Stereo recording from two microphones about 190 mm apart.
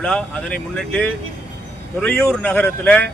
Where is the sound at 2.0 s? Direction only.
10° left (ahead or behind).